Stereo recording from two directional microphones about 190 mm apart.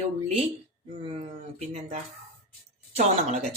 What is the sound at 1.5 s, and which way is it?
Speech, 35° right (ahead or behind).